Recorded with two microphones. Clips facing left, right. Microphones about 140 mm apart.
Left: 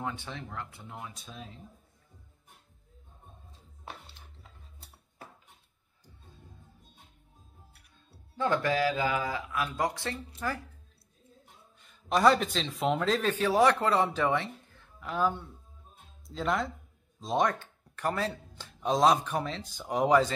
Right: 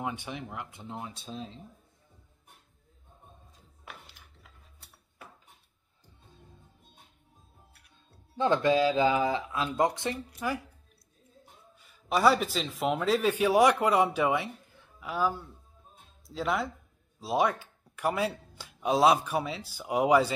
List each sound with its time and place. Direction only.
0.0 s speech: 15° right (ahead or behind)
3.8 s a sound: 30° left (ahead or behind)
8.4 s speech: 20° right (ahead or behind)
11.8 s speech: 5° right (ahead or behind)